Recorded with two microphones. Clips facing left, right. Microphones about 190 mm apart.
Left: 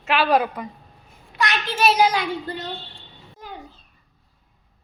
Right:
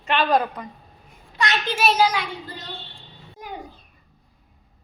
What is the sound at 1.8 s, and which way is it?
Speech, 5° right (ahead or behind).